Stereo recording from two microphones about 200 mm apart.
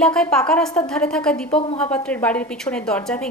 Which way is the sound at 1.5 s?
30° left (ahead or behind).